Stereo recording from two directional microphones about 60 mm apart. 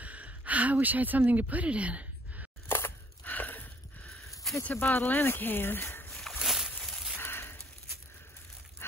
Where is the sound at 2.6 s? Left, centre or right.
Left.